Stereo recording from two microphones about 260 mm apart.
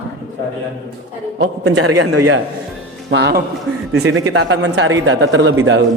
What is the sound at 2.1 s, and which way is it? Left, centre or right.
Speech, right.